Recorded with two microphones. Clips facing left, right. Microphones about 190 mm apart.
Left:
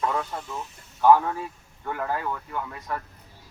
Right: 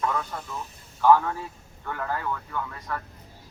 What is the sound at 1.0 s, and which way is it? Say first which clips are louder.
Speech: left 1 dB; 15° left (ahead or behind).